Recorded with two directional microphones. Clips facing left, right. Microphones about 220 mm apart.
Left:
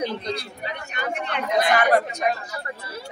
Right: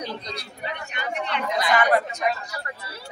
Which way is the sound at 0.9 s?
50° left (ahead or behind).